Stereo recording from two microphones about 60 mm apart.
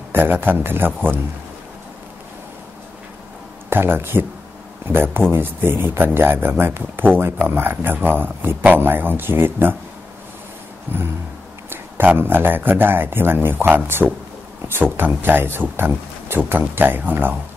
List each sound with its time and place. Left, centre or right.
0.1 s speech: right
3.7 s speech: right
10.9 s speech: right